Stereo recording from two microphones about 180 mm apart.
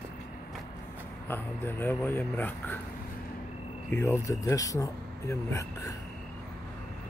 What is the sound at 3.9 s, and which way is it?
Speech, 15° left (ahead or behind).